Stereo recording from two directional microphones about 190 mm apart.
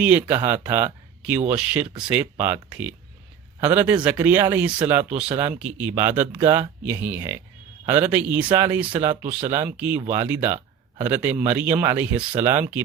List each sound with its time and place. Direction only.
0.0 s speech: 10° right (ahead or behind)